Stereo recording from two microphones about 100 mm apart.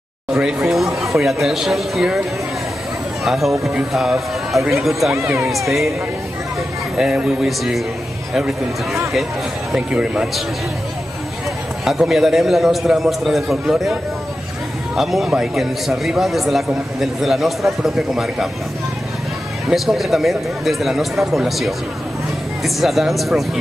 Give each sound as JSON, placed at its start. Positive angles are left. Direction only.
{"t": 0.3, "sound": "a man's voice", "side_deg": -10}
{"t": 3.3, "sound": "a man's voice", "side_deg": 0}
{"t": 5.1, "sound": "speech", "side_deg": -30}
{"t": 5.4, "sound": "a man's voice", "side_deg": 0}
{"t": 7.0, "sound": "a man's voice", "side_deg": -5}
{"t": 9.7, "sound": "a man's voice", "side_deg": -10}
{"t": 11.8, "sound": "a man's voice", "side_deg": 0}
{"t": 15.0, "sound": "a man's voice", "side_deg": 0}
{"t": 19.7, "sound": "a man's voice", "side_deg": 0}